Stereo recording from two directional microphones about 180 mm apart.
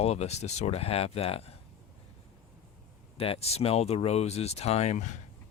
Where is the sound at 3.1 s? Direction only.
30° left (ahead or behind).